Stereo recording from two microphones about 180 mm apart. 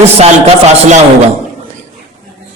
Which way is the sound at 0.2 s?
40° right (ahead or behind).